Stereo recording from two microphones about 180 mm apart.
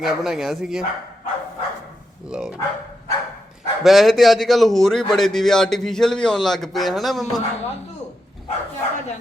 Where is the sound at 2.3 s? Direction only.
5° right (ahead or behind).